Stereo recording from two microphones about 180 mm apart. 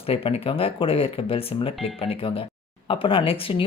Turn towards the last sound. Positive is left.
turn(degrees=30)  # may be behind; listen again after turning